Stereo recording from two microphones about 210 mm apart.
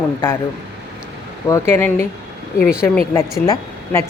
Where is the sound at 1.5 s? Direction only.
10° left (ahead or behind).